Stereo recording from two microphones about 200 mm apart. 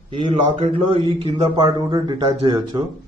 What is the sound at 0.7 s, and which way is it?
A man's voice, 30° right (ahead or behind).